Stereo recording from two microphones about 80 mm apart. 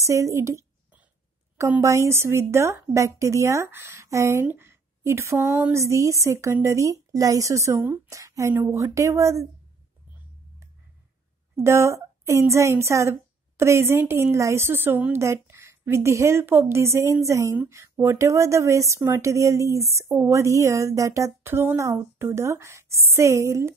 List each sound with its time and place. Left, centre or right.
0.0 s speech: right
1.8 s speech: right
4.5 s a sound: right
5.7 s speech: right
11.5 s speech: right
21.4 s speech: right